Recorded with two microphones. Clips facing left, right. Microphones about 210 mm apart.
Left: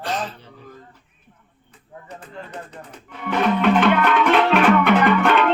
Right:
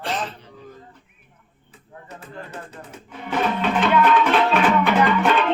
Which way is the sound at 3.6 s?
60° left (ahead or behind).